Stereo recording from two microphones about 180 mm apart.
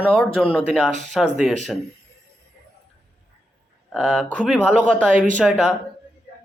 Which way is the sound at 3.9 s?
Centre (ahead or behind).